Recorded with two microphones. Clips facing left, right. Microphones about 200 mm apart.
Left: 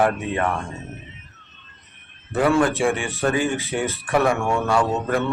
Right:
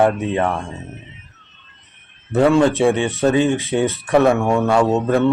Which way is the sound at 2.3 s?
20° right (ahead or behind).